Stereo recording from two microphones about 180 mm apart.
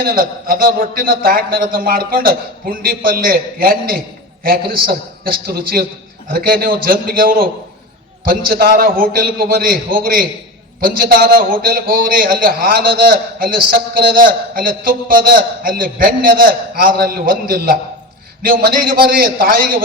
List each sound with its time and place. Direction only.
0.0 s a man's voice: 55° right (ahead or behind)